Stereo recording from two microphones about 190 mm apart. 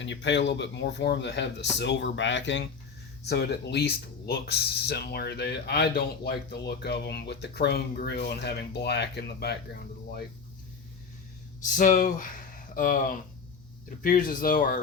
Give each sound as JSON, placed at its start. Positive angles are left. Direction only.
{"t": 0.0, "sound": "a man's voice", "side_deg": 70}
{"t": 3.2, "sound": "speech", "side_deg": 60}
{"t": 11.6, "sound": "speech", "side_deg": 45}